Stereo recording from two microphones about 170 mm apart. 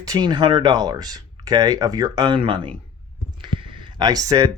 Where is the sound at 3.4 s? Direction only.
30° right (ahead or behind).